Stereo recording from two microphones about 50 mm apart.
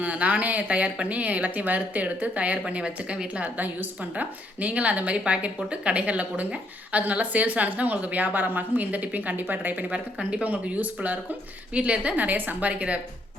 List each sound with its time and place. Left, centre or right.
0.0 s a woman's voice: right
3.6 s a woman's voice: right
9.9 s speech: centre
10.4 s a woman's voice: right